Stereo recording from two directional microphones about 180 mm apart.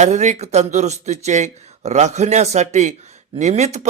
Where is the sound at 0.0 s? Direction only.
40° right (ahead or behind).